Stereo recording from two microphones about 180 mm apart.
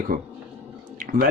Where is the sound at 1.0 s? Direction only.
45° right (ahead or behind).